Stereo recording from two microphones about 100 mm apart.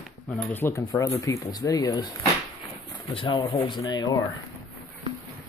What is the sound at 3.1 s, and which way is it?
Speech, 55° left (ahead or behind).